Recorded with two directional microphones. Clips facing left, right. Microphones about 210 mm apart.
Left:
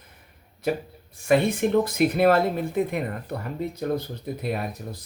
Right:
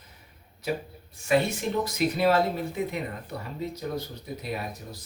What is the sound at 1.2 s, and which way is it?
Speech, 55° left (ahead or behind).